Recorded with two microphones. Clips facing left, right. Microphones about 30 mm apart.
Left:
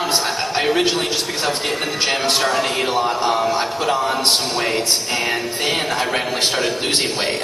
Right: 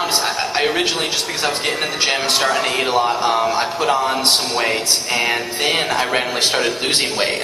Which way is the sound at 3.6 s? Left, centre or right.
Centre.